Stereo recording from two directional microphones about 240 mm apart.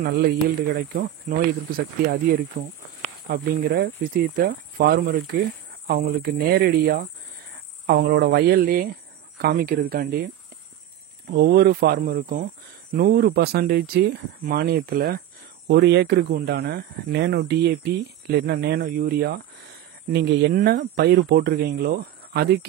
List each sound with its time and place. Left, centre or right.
0.0 s speech: right
11.3 s speech: right